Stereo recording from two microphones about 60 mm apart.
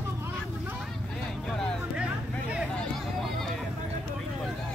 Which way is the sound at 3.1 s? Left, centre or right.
Centre.